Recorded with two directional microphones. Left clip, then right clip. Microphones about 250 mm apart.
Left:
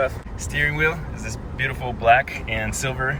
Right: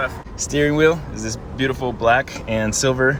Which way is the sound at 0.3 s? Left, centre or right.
Centre.